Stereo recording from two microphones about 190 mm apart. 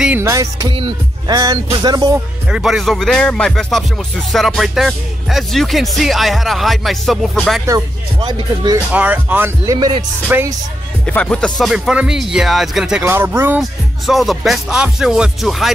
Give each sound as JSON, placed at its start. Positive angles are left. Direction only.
{"t": 0.0, "sound": "speech", "side_deg": -10}
{"t": 2.5, "sound": "speech", "side_deg": 0}
{"t": 8.2, "sound": "speech", "side_deg": -20}
{"t": 8.9, "sound": "speech", "side_deg": -10}
{"t": 9.8, "sound": "speech", "side_deg": -25}
{"t": 10.2, "sound": "speech", "side_deg": -10}
{"t": 11.1, "sound": "speech", "side_deg": 5}
{"t": 13.6, "sound": "speech", "side_deg": 0}